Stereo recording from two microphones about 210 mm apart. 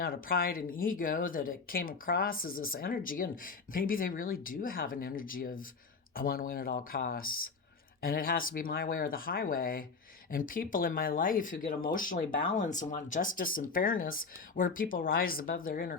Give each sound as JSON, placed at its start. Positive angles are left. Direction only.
{"t": 0.0, "sound": "speech", "side_deg": 45}